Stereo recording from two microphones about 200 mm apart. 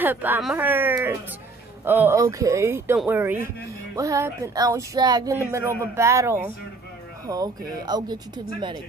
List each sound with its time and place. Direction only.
0.0 s speech: 10° right (ahead or behind)